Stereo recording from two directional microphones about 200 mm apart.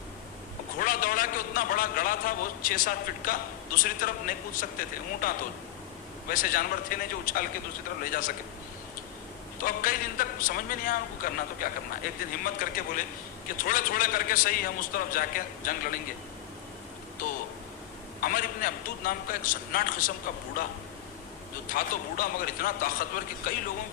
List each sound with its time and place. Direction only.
0.8 s a man's voice: 45° left (ahead or behind)
9.6 s a man's voice: 45° left (ahead or behind)
17.2 s a man's voice: 45° left (ahead or behind)
21.7 s a man's voice: 45° left (ahead or behind)